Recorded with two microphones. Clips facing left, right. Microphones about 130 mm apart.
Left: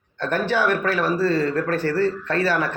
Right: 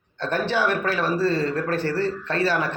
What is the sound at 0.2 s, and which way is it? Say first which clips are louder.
Speech: left 2 dB; 20° right (ahead or behind).